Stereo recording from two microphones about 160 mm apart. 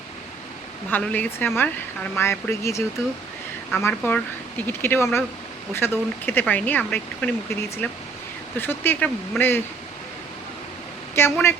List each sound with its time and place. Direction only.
0.9 s speech: 10° left (ahead or behind)
11.1 s speech: 15° left (ahead or behind)